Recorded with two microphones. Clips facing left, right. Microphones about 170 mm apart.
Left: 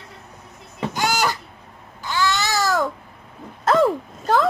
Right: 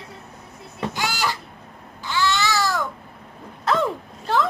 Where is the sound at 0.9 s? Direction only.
45° left (ahead or behind).